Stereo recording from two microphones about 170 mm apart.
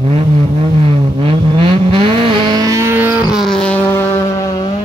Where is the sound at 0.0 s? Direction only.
35° right (ahead or behind); by 4.7 s 20° left (ahead or behind).